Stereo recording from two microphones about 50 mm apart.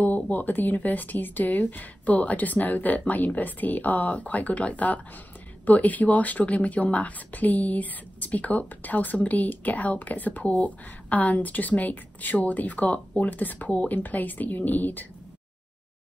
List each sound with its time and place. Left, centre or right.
0.0 s speech: left